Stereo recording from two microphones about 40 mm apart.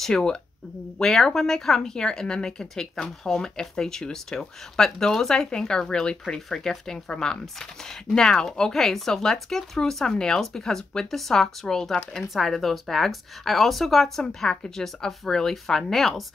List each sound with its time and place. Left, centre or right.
0.1 s speech: centre
5.3 s speech: centre